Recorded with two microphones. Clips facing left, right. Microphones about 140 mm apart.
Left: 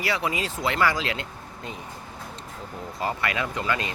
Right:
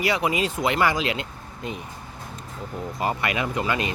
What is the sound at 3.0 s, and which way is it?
Speech, 15° right (ahead or behind).